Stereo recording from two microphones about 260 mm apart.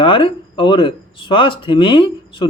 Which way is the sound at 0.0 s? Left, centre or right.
Centre.